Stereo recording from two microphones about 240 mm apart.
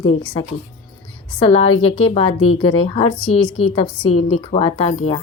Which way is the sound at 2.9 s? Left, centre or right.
Left.